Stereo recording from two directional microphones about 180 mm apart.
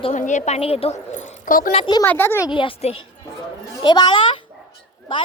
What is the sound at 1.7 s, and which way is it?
Speech, 25° left (ahead or behind).